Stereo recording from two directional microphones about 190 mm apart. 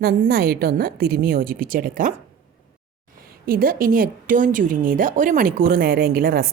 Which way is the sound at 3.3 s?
50° right (ahead or behind).